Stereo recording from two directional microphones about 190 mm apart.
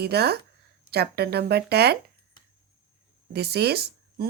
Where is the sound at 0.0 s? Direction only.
60° right (ahead or behind).